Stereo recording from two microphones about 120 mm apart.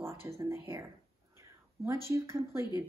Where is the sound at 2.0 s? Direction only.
20° right (ahead or behind).